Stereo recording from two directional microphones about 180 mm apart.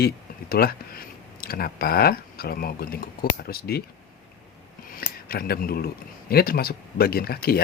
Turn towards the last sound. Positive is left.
turn(degrees=60)  # may be behind; listen again after turning